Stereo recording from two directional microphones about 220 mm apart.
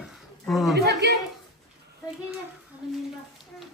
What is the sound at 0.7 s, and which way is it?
Speech, 50° right (ahead or behind).